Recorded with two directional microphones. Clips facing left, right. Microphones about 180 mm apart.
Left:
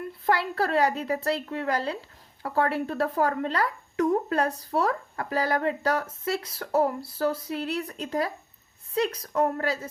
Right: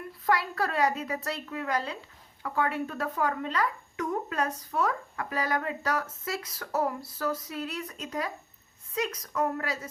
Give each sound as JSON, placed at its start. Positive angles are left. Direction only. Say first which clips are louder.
{"t": 0.3, "sound": "speech", "louder": "left 3 dB", "side_deg": 30}